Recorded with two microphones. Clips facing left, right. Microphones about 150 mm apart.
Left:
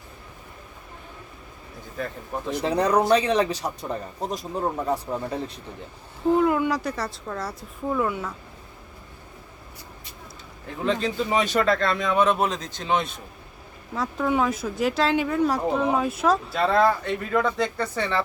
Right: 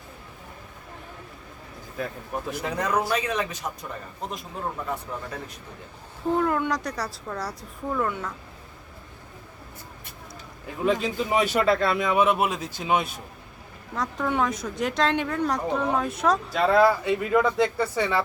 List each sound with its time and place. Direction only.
2.0 s speech: 5° right (ahead or behind)
2.6 s speech: 35° left (ahead or behind)
6.3 s speech: 5° left (ahead or behind)
10.7 s a man's voice: 5° right (ahead or behind)